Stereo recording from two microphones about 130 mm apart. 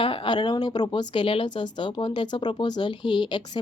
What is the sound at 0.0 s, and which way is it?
Speech, 40° left (ahead or behind).